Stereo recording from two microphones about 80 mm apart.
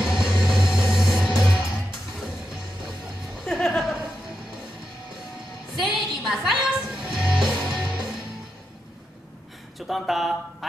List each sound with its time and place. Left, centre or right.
0.0 s music: centre
5.8 s music: centre
9.8 s a sound: centre